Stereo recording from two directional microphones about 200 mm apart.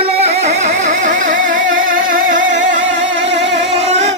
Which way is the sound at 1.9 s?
45° right (ahead or behind).